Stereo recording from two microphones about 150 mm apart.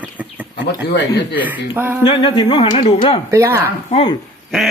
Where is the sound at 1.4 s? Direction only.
15° right (ahead or behind).